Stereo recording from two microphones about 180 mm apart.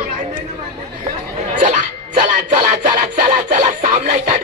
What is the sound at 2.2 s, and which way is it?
Music, 45° right (ahead or behind).